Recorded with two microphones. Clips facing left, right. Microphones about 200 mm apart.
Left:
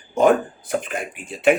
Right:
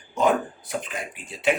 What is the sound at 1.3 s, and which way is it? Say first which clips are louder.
Speech: left 11 dB; 50° left (ahead or behind).